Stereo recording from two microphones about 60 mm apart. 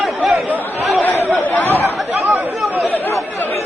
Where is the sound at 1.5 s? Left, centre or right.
Left.